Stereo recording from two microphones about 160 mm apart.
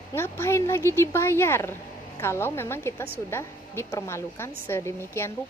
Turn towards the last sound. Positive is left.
turn(degrees=15)  # may be behind; listen again after turning